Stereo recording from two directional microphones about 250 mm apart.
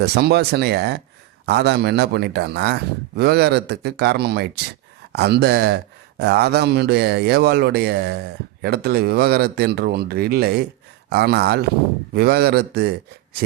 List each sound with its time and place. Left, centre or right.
0.0 s speech: right